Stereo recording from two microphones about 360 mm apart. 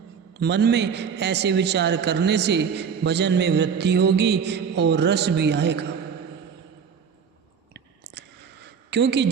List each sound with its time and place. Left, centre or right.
0.3 s a man's voice: right
7.7 s a sound: right
8.9 s a woman's voice: right